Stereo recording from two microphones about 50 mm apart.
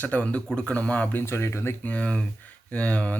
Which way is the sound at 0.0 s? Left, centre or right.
Left.